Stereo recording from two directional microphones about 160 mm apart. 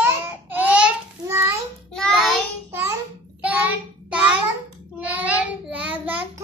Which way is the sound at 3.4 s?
10° right (ahead or behind).